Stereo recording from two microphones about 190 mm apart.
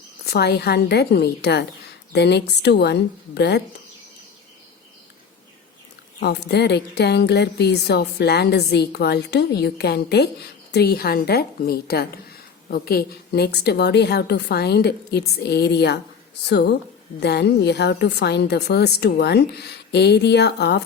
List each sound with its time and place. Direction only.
0.3 s speech: 60° left (ahead or behind)
6.1 s speech: 60° left (ahead or behind)